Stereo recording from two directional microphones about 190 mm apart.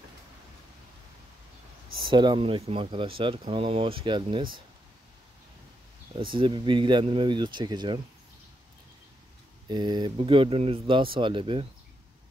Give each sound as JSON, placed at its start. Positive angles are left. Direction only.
{"t": 2.0, "sound": "speech", "side_deg": -25}
{"t": 6.1, "sound": "speech", "side_deg": -25}
{"t": 9.7, "sound": "speech", "side_deg": -25}